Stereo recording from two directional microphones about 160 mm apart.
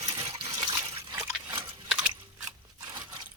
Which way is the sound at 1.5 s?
30° right (ahead or behind).